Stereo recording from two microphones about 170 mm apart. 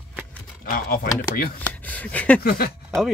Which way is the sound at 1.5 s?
10° left (ahead or behind).